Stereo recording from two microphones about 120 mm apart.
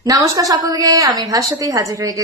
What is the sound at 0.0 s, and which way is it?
A woman's voice, 30° right (ahead or behind).